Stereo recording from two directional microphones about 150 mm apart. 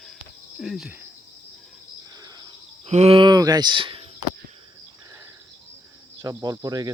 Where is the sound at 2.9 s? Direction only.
45° right (ahead or behind).